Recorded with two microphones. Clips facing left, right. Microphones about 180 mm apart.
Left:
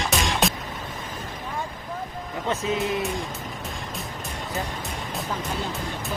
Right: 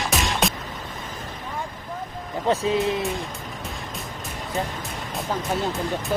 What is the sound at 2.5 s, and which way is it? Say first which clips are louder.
Speech: right 4 dB; 35° right (ahead or behind).